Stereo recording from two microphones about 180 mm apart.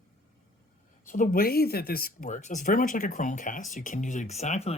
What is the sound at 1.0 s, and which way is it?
Speech, 45° left (ahead or behind).